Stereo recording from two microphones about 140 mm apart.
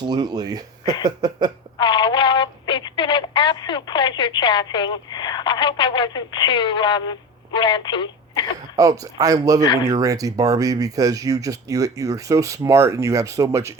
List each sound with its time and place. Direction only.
0.0 s speech: 30° right (ahead or behind)
1.8 s telephone: 35° left (ahead or behind)
8.7 s speech: 25° right (ahead or behind)